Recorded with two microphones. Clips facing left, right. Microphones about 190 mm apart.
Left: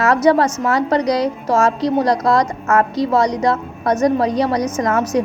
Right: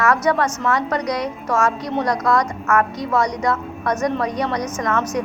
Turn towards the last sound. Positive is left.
turn(degrees=35)  # may be behind; listen again after turning